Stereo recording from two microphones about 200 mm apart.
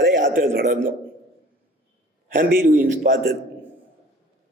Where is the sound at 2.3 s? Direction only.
40° right (ahead or behind).